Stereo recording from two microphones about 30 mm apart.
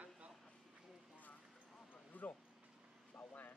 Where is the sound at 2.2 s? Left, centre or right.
Left.